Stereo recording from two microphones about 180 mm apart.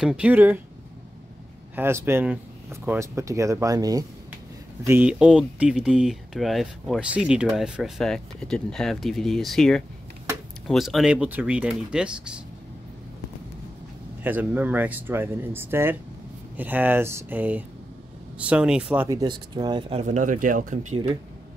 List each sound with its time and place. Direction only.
0.0 s speech: 5° right (ahead or behind)
1.8 s speech: 15° right (ahead or behind)
4.8 s speech: 10° right (ahead or behind)
14.2 s speech: 10° right (ahead or behind)
19.0 s speech: 20° right (ahead or behind)
20.1 s speech: 45° right (ahead or behind)